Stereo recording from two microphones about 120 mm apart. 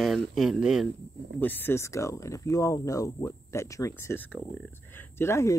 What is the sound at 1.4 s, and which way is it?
Speech, 15° left (ahead or behind).